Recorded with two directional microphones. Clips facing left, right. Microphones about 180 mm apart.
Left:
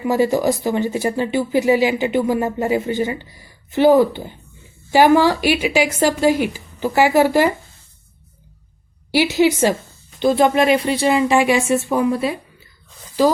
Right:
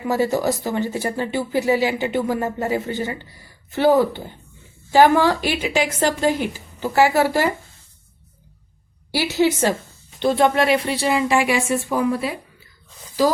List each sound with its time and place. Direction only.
0.1 s speech: 15° left (ahead or behind)
9.1 s speech: 15° left (ahead or behind)